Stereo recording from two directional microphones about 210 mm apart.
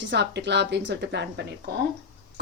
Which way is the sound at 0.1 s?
55° right (ahead or behind).